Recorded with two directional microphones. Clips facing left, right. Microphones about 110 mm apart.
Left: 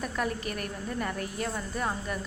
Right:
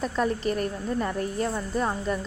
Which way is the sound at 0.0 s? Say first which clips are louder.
Right 6 dB; 30° right (ahead or behind).